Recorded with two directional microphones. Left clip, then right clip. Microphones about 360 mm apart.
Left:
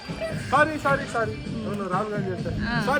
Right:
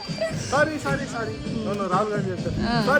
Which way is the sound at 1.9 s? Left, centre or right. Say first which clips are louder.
Right 3 dB; centre.